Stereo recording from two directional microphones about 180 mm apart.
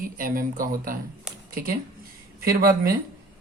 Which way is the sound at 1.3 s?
5° right (ahead or behind).